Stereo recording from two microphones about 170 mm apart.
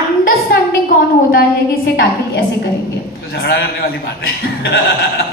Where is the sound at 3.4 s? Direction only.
70° left (ahead or behind).